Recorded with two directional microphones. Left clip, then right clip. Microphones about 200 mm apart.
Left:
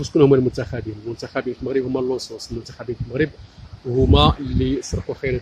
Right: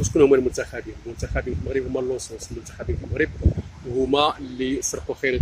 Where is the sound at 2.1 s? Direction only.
40° left (ahead or behind).